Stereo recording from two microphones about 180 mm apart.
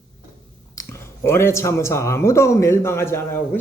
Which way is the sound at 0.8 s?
15° left (ahead or behind).